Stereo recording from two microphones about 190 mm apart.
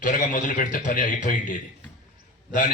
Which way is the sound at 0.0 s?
45° left (ahead or behind).